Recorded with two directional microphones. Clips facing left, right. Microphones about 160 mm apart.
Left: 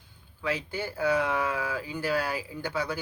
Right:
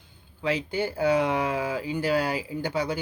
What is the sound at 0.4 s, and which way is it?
Speech, 20° right (ahead or behind).